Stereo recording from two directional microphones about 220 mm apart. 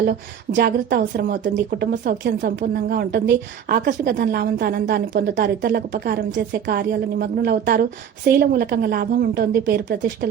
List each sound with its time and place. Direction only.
0.0 s a woman's voice: 45° right (ahead or behind)